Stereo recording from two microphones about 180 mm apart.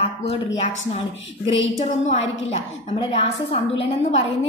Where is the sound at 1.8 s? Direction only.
35° left (ahead or behind).